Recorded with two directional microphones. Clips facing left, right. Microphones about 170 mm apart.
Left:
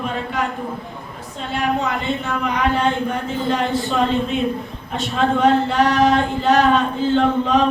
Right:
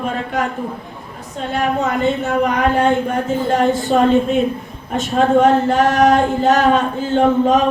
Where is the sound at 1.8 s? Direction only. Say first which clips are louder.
Right 5 dB; 45° right (ahead or behind).